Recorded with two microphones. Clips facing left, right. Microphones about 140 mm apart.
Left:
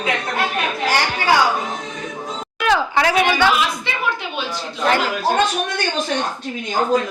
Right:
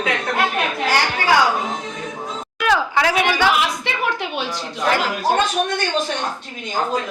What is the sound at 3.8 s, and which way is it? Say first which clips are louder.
Speech: right 1 dB; 70° right (ahead or behind).